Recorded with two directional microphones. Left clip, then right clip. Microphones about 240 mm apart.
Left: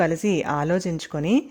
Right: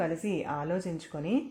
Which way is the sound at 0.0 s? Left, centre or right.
Left.